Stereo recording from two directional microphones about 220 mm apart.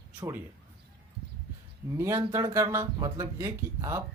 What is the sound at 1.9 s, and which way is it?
Speech, 15° right (ahead or behind).